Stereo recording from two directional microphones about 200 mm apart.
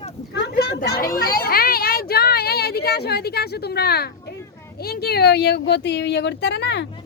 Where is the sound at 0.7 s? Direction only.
45° left (ahead or behind).